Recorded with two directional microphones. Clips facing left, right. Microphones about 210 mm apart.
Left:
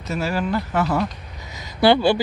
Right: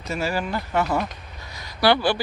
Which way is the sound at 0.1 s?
Centre (ahead or behind).